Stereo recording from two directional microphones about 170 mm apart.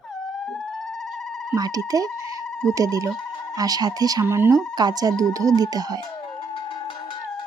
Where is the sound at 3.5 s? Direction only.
20° right (ahead or behind).